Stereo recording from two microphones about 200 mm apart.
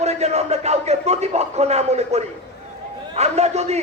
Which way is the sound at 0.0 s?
30° right (ahead or behind).